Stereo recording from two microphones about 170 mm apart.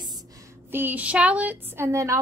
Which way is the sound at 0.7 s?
10° right (ahead or behind).